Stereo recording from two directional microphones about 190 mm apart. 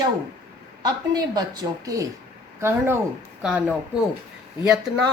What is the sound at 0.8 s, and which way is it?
A woman's voice, 20° right (ahead or behind).